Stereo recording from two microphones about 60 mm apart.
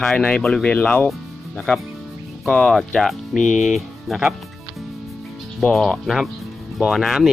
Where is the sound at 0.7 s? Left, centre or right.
Centre.